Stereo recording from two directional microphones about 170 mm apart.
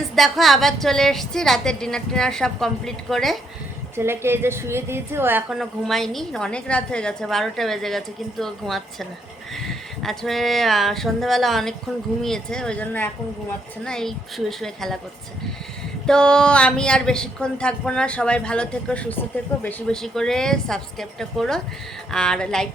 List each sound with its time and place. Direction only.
0.2 s a woman's voice: centre (ahead or behind)
3.9 s a woman's voice: 15° right (ahead or behind)
5.5 s a woman's voice: centre (ahead or behind)
16.0 s a woman's voice: 5° left (ahead or behind)